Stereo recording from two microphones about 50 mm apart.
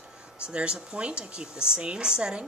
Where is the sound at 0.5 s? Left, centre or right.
Centre.